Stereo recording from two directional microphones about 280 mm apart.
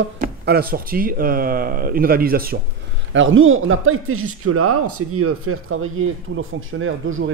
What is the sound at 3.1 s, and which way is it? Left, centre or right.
Speech, right.